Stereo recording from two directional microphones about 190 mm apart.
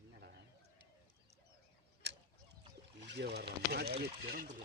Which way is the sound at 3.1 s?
60° right (ahead or behind).